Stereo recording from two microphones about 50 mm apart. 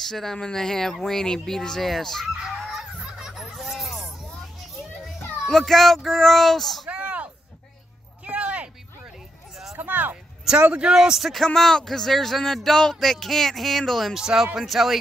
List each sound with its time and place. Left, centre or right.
0.0 s speech: centre
2.6 s music: centre
4.4 s children playing: centre
5.5 s speech: centre
6.9 s a sound: right
8.3 s a sound: right
9.8 s a sound: right
10.7 s a man's voice: centre
11.1 s speech: centre
14.1 s a man's voice: centre